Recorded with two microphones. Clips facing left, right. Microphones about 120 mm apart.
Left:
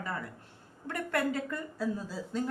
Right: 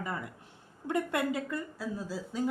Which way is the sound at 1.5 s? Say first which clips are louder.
Left 2 dB; 5° right (ahead or behind).